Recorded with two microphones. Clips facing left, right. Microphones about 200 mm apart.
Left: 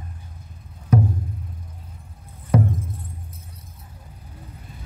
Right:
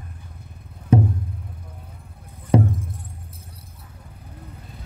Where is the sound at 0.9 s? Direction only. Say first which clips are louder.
Right 2 dB; 30° right (ahead or behind).